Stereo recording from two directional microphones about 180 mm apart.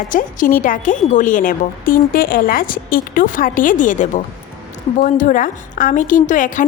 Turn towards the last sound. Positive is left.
turn(degrees=45)  # may be behind; listen again after turning